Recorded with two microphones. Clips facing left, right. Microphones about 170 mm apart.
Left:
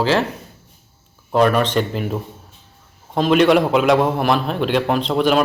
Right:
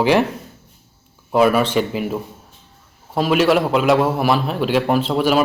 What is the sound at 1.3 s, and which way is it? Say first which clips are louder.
A man's voice: right 1 dB; 5° right (ahead or behind).